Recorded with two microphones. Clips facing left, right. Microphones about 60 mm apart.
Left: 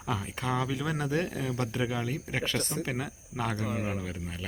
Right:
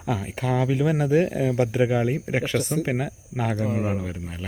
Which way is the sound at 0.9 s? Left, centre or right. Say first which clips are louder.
Right 9 dB; centre.